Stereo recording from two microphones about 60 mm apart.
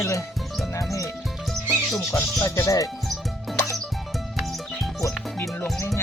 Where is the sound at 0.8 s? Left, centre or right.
Left.